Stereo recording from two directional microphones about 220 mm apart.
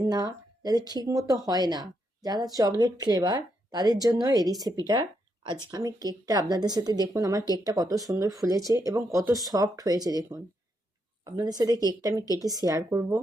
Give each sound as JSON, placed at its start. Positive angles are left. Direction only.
{"t": 0.0, "sound": "speech", "side_deg": -15}